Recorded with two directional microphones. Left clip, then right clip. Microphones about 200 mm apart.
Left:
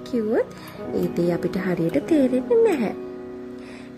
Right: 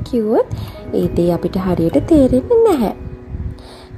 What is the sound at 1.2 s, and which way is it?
Speech, centre (ahead or behind).